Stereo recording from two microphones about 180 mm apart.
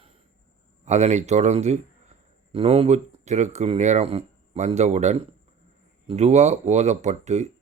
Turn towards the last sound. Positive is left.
turn(degrees=-40)  # may be behind; listen again after turning